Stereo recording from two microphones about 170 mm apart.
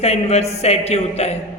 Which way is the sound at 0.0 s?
40° left (ahead or behind).